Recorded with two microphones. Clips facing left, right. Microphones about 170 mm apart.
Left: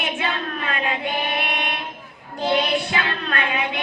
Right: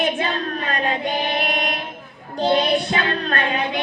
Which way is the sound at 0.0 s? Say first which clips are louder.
Right 4 dB; 35° right (ahead or behind).